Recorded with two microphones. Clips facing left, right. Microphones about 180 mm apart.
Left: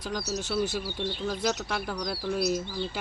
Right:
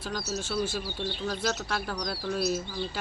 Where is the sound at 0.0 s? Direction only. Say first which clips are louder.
Left 1 dB; 15° left (ahead or behind).